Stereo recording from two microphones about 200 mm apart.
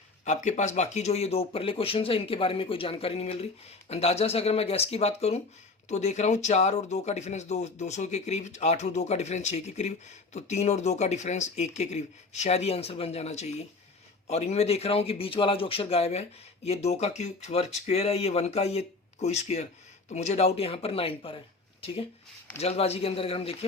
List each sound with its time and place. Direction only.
0.3 s speech: 35° left (ahead or behind)